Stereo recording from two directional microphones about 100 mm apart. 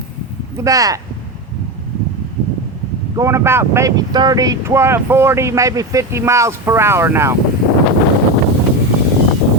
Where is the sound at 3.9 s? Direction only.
45° right (ahead or behind).